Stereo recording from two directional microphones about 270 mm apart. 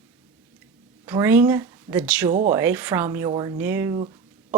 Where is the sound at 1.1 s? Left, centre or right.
Centre.